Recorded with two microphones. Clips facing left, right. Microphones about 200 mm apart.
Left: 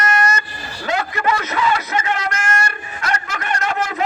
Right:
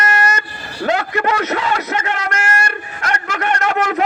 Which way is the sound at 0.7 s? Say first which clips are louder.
Right 4 dB; 60° right (ahead or behind).